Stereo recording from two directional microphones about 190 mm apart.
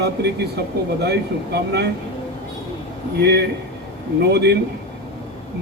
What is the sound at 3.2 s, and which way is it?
Speech, 60° right (ahead or behind).